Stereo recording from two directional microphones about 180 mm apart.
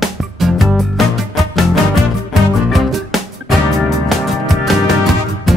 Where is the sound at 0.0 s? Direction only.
Centre (ahead or behind).